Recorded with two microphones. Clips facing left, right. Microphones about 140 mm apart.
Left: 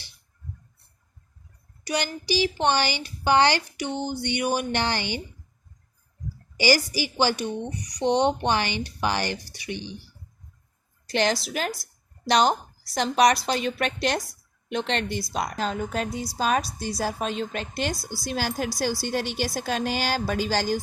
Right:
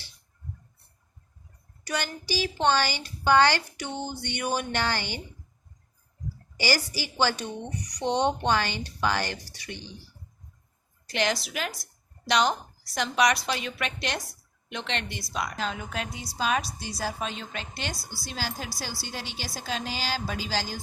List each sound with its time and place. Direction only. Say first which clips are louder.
1.8 s a woman's voice: left 4 dB; 15° left (ahead or behind)
6.6 s a woman's voice: left 6 dB; 15° left (ahead or behind)
11.1 s a woman's voice: left 4 dB; 35° left (ahead or behind); by 20.7 s 55° left (ahead or behind)